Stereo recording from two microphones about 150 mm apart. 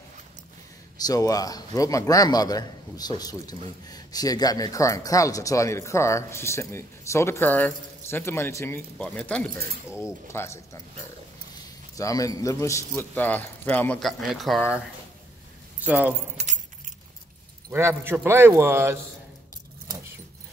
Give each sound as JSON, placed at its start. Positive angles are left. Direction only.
{"t": 0.9, "sound": "speech", "side_deg": 25}
{"t": 12.0, "sound": "a man's voice", "side_deg": 25}
{"t": 15.8, "sound": "a man's voice", "side_deg": -10}
{"t": 16.4, "sound": "keys jangling", "side_deg": -45}
{"t": 17.6, "sound": "a man's voice", "side_deg": -15}